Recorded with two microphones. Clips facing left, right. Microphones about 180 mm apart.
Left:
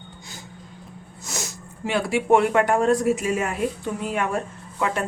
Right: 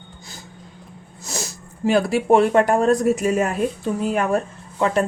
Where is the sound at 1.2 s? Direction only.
30° right (ahead or behind).